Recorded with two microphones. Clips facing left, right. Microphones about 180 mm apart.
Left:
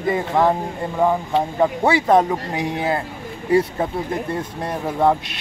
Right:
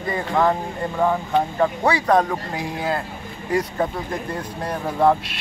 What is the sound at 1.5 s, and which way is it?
Speech, 25° left (ahead or behind).